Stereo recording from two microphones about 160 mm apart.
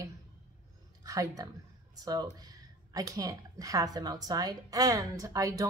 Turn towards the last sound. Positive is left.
turn(degrees=-20)  # may be behind; listen again after turning